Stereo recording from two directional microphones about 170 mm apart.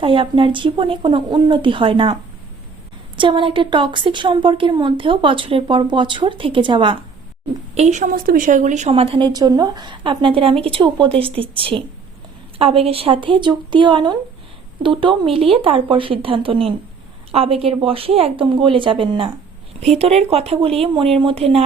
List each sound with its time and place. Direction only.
0.0 s a woman's voice: 30° right (ahead or behind)
3.2 s a woman's voice: 30° right (ahead or behind)
7.8 s a woman's voice: 45° right (ahead or behind)